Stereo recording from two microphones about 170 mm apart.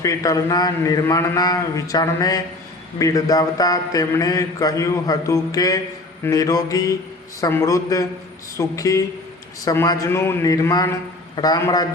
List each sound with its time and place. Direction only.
0.0 s a man's voice: 20° left (ahead or behind)